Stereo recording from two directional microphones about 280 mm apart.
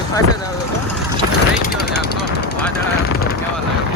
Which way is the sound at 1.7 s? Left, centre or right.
Left.